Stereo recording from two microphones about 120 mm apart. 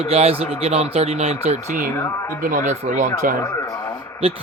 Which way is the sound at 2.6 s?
90° right.